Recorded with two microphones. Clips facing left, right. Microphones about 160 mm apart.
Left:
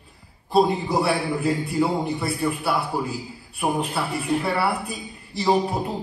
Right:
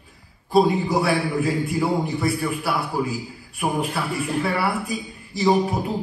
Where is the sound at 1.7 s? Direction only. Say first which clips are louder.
Even; 5° right (ahead or behind).